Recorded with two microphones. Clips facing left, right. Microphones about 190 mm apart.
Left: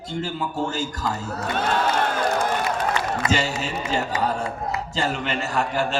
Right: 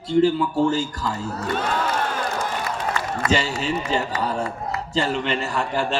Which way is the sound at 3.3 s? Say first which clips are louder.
Right 5 dB; 45° left (ahead or behind).